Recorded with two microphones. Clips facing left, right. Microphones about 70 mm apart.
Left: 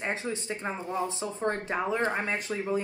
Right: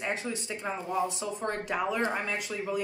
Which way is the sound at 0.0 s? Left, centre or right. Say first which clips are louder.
Left 1 dB; left.